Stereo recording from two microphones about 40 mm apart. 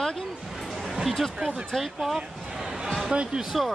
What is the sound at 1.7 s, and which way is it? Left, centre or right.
Speech, centre.